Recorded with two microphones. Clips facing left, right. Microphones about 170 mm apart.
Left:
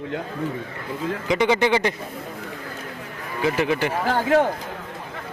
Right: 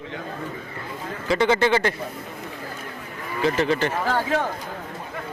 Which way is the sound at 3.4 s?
10° left (ahead or behind).